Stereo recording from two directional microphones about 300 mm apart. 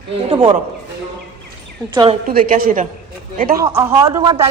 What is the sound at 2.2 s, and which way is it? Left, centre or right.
Speech, right.